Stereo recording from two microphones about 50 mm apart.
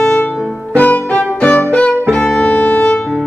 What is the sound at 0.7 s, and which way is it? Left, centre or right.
Music, left.